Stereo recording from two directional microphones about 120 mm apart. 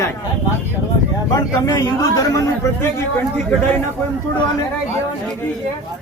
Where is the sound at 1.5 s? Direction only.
30° left (ahead or behind).